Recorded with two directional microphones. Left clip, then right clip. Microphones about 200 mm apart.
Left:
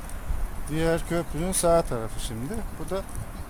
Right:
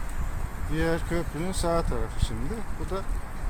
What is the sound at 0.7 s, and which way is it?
Speech, 55° left (ahead or behind).